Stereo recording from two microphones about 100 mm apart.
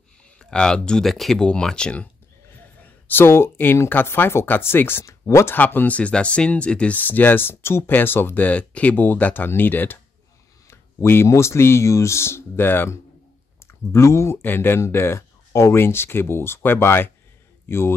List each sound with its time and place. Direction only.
0.4 s speech: 10° left (ahead or behind)
2.8 s a man's voice: 20° left (ahead or behind)